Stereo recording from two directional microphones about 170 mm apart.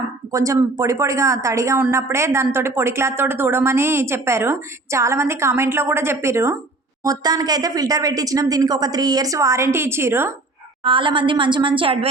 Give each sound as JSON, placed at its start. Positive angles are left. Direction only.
{"t": 0.3, "sound": "a woman's voice", "side_deg": -20}
{"t": 10.8, "sound": "a woman's voice", "side_deg": -30}